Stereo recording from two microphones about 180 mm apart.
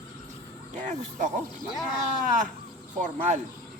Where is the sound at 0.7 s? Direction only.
45° right (ahead or behind).